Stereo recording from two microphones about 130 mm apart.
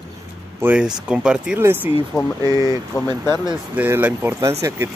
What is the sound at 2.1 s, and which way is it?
Speech, 25° left (ahead or behind).